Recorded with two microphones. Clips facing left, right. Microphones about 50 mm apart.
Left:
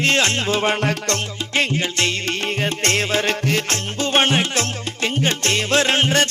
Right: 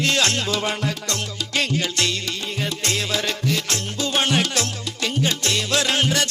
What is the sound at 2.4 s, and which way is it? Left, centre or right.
Music, left.